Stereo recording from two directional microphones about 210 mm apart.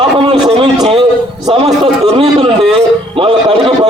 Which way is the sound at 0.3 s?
25° right (ahead or behind).